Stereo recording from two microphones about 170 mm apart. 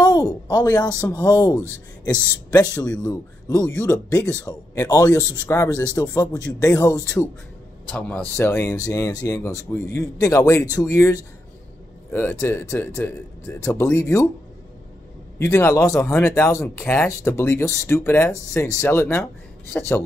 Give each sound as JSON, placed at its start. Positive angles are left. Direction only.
{"t": 0.0, "sound": "a sound", "side_deg": 20}
{"t": 1.1, "sound": "a man's voice", "side_deg": 20}
{"t": 8.4, "sound": "a man's voice", "side_deg": 15}
{"t": 15.3, "sound": "speech", "side_deg": 15}